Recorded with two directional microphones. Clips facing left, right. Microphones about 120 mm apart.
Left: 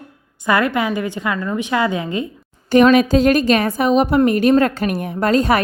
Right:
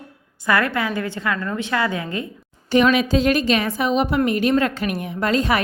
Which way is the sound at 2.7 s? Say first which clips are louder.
Left 5 dB; 45° left (ahead or behind).